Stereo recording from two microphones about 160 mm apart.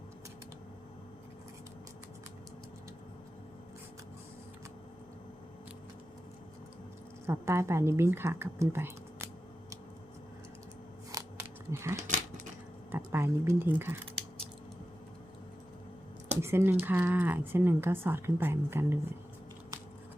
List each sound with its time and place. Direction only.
7.3 s speech: 15° right (ahead or behind)
11.1 s a sound: 20° right (ahead or behind)
13.1 s speech: 15° right (ahead or behind)
16.4 s speech: 15° right (ahead or behind)